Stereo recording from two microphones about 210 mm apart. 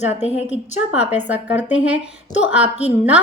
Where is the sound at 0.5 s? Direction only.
5° right (ahead or behind).